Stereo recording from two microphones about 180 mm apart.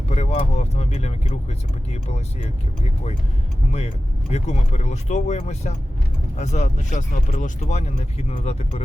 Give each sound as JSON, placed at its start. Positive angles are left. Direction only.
{"t": 0.1, "sound": "speech", "side_deg": 40}
{"t": 3.7, "sound": "speech", "side_deg": 35}